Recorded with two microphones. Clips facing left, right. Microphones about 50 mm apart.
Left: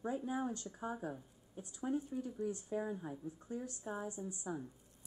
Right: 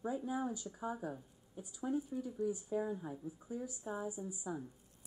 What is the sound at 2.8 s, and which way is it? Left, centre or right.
Speech, centre.